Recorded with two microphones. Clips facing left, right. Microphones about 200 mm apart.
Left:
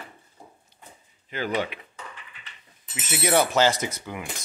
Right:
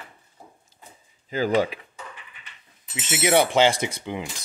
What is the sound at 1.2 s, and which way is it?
Speech, 35° right (ahead or behind).